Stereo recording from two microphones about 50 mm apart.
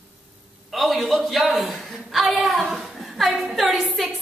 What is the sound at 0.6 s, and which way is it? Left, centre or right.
A woman's voice, centre.